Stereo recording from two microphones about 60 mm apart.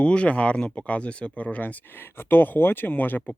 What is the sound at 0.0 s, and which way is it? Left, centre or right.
Speech, centre.